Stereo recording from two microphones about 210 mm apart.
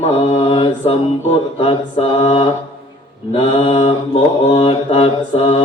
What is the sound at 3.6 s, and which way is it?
Mantra, 25° left (ahead or behind).